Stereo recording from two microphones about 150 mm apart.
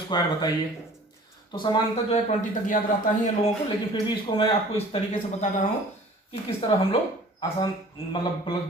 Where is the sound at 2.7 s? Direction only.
60° left (ahead or behind).